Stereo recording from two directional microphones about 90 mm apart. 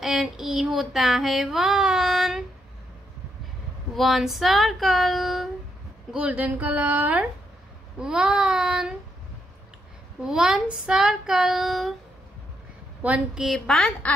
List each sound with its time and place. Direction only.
0.0 s child singing: 5° right (ahead or behind)
3.9 s child singing: centre (ahead or behind)
6.1 s child singing: 15° right (ahead or behind)
10.2 s child singing: 5° right (ahead or behind)
13.0 s child singing: 15° right (ahead or behind)
13.5 s child singing: 5° left (ahead or behind)